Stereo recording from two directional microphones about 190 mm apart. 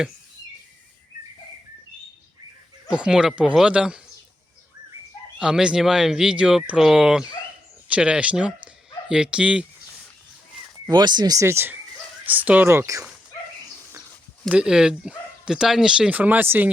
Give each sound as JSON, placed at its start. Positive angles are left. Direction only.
{"t": 2.9, "sound": "speech", "side_deg": -5}
{"t": 5.4, "sound": "speech", "side_deg": -5}
{"t": 10.8, "sound": "speech", "side_deg": -25}
{"t": 14.5, "sound": "speech", "side_deg": -5}